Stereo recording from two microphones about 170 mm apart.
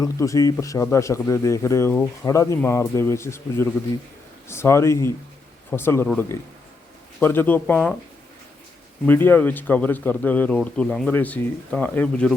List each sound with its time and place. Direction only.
0.0 s speech: 20° left (ahead or behind)
9.0 s speech: 10° left (ahead or behind)